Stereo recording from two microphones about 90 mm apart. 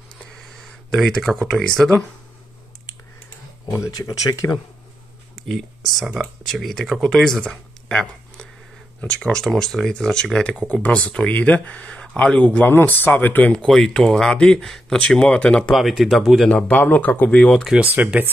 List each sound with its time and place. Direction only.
0.8 s speech: 5° left (ahead or behind)
3.9 s speech: 40° left (ahead or behind)
5.5 s speech: centre (ahead or behind)
7.4 s a sound: 10° left (ahead or behind)
9.0 s speech: 10° left (ahead or behind)
13.5 s speech: 5° left (ahead or behind)
15.7 s speech: centre (ahead or behind)
16.6 s speech: 20° left (ahead or behind)
17.7 s speech: 15° right (ahead or behind)